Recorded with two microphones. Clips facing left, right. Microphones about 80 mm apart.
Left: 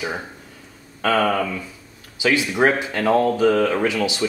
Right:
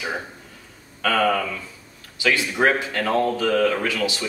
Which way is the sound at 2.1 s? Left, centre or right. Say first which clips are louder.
Left 2 dB; centre.